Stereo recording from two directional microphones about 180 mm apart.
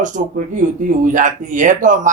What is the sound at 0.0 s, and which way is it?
A woman's voice, 45° right (ahead or behind).